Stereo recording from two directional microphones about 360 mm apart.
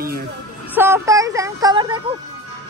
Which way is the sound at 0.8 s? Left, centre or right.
Centre.